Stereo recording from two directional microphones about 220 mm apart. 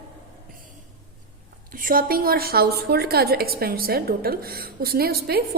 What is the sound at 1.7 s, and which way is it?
A woman's voice, 40° right (ahead or behind).